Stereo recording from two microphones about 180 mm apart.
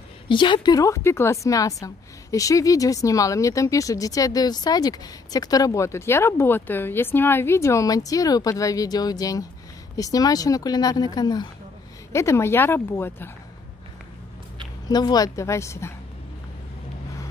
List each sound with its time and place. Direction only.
0.3 s speech: 25° left (ahead or behind)
14.9 s speech: 20° left (ahead or behind)